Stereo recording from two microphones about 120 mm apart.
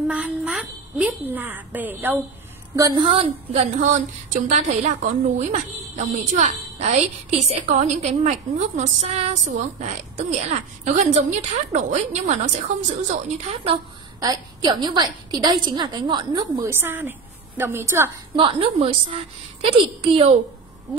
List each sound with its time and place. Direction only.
0.1 s a woman's voice: 5° right (ahead or behind)
2.7 s a woman's voice: 25° right (ahead or behind)
3.0 s a woman's voice: 50° right (ahead or behind)
3.9 s a woman's voice: 80° right
14.2 s a woman's voice: 35° right (ahead or behind)
16.6 s a woman's voice: 20° right (ahead or behind)
18.3 s a woman's voice: 50° right (ahead or behind)